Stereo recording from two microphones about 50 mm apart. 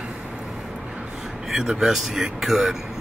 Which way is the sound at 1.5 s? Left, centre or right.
Centre.